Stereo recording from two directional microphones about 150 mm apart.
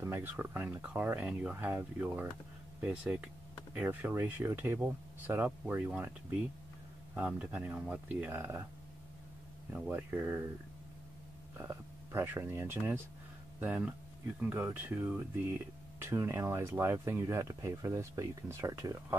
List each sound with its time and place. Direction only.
0.0 s speech: 15° right (ahead or behind)
9.7 s speech: 15° right (ahead or behind)
11.5 s speech: 15° right (ahead or behind)